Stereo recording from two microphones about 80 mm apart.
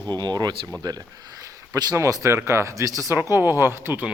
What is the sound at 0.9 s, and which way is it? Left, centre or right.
Speech, right.